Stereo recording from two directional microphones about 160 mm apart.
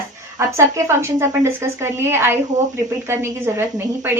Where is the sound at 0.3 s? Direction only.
15° right (ahead or behind).